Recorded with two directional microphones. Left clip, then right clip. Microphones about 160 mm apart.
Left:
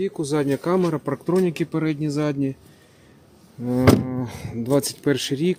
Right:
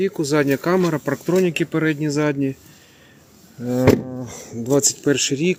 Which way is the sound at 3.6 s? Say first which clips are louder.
Right 2 dB; 20° left (ahead or behind).